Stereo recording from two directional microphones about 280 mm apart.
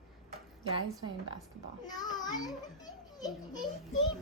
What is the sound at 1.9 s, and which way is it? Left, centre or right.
Speech, centre.